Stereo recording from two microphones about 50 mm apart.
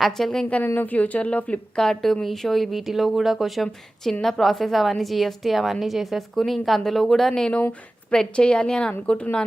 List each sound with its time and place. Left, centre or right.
0.0 s a woman's voice: centre
0.8 s speech: left
1.7 s a woman's voice: centre
8.1 s a woman's voice: centre